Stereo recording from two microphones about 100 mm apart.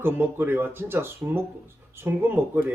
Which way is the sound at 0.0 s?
20° right (ahead or behind).